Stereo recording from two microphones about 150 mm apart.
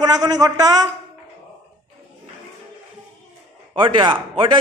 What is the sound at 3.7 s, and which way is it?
Speech, 35° right (ahead or behind).